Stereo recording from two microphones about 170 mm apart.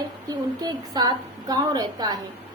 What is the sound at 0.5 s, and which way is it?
A woman's voice, 25° right (ahead or behind).